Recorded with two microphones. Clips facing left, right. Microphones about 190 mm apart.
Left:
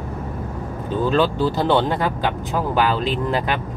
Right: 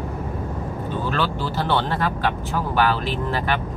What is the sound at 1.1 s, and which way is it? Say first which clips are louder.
Speech: left 8 dB; 20° left (ahead or behind).